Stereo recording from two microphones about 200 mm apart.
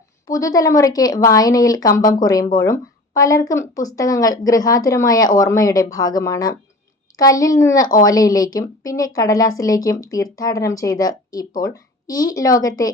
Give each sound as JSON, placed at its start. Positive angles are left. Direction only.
{"t": 0.3, "sound": "a woman's voice", "side_deg": 15}